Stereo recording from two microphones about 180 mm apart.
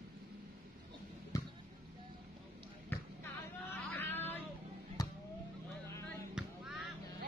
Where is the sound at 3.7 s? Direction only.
10° left (ahead or behind).